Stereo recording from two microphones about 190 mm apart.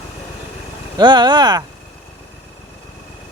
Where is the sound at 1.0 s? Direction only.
25° right (ahead or behind).